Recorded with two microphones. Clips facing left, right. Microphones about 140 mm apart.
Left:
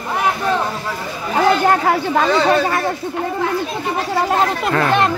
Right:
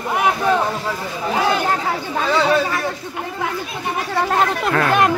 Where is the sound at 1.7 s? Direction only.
70° left (ahead or behind).